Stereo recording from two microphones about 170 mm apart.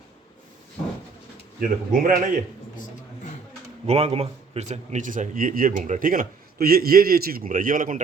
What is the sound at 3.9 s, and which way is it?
A man's voice, 35° right (ahead or behind).